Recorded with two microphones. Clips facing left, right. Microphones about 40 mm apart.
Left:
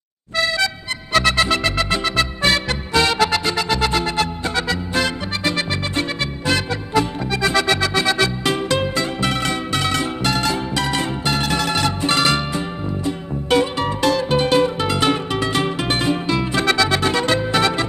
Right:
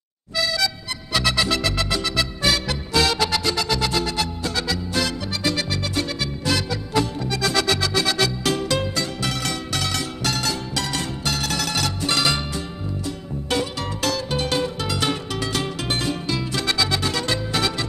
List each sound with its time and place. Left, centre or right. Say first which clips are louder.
1.1 s music: left 5 dB; centre
1.4 s music: left 4 dB; left
6.9 s music: left 3 dB; centre